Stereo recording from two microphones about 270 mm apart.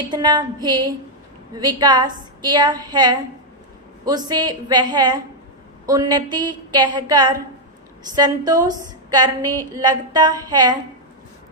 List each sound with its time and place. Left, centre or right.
0.1 s a woman's voice: centre
9.7 s a woman's voice: centre